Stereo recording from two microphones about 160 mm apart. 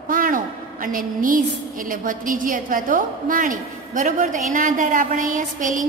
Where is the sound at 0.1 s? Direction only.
60° right (ahead or behind).